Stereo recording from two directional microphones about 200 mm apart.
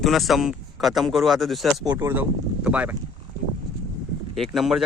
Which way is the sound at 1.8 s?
10° right (ahead or behind).